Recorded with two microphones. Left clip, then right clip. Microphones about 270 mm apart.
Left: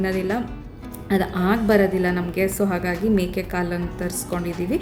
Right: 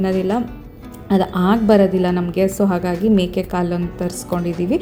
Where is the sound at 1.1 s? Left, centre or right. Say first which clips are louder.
Right 4 dB; centre.